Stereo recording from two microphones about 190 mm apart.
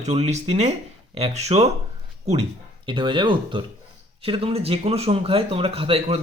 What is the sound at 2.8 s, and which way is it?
Speech, 25° right (ahead or behind).